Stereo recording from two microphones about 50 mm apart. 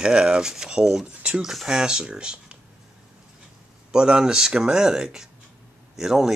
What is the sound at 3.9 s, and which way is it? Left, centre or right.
Speech, centre.